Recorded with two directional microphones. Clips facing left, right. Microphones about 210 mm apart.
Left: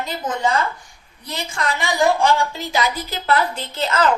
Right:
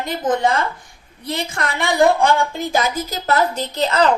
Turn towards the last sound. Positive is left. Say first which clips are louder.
# right 2 dB
turn(degrees=-35)  # may be behind; listen again after turning